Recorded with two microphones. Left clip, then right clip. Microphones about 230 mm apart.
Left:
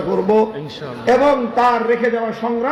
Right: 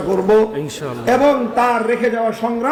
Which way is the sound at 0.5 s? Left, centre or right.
Right.